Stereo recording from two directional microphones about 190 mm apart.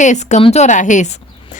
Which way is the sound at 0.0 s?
40° left (ahead or behind).